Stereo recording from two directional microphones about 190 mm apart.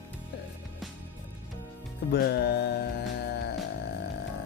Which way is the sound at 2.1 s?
60° left (ahead or behind).